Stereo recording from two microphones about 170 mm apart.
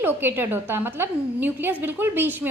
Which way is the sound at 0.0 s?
10° right (ahead or behind).